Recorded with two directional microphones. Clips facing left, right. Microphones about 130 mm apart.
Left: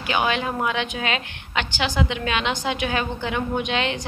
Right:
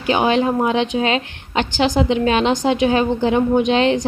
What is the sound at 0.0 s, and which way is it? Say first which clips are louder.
A woman's voice: right 7 dB; 30° right (ahead or behind).